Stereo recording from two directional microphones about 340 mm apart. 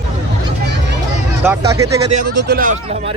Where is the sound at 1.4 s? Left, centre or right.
Centre.